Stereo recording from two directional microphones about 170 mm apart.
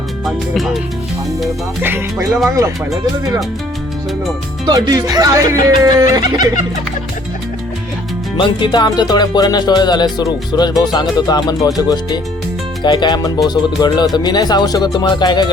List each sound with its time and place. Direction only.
0.3 s speech: centre (ahead or behind)
1.8 s music: 15° right (ahead or behind)
2.6 s speech: 20° right (ahead or behind)
4.6 s speech: 20° right (ahead or behind)
8.4 s music: 30° left (ahead or behind)